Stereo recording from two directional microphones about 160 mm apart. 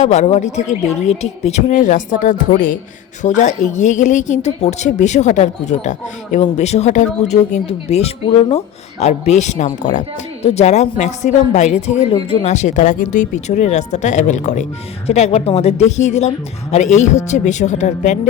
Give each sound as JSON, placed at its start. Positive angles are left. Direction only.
{"t": 0.0, "sound": "a woman's voice", "side_deg": 45}